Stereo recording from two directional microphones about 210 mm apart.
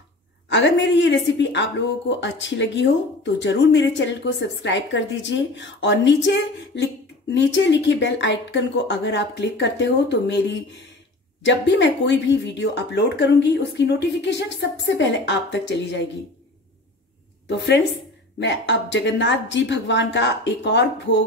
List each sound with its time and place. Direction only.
0.5 s speech: 60° left (ahead or behind)
17.5 s speech: 55° left (ahead or behind)